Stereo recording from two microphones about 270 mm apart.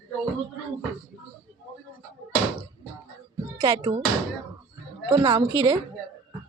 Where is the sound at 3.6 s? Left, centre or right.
Centre.